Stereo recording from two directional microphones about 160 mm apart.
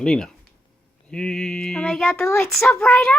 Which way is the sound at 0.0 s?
5° left (ahead or behind).